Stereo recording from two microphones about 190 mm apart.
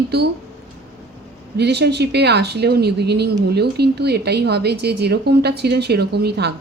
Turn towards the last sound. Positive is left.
turn(degrees=-60)  # may be behind; listen again after turning